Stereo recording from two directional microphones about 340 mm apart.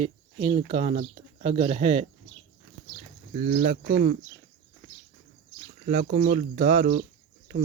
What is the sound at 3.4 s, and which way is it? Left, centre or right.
Speech, right.